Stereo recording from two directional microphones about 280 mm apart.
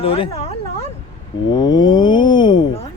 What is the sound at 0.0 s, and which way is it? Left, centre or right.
Speech, centre.